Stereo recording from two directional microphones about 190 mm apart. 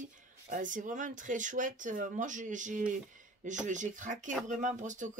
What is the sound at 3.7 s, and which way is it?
Speech, 40° right (ahead or behind).